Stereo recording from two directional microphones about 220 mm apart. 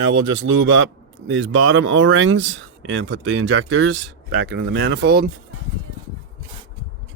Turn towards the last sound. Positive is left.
turn(degrees=-45)  # may be behind; listen again after turning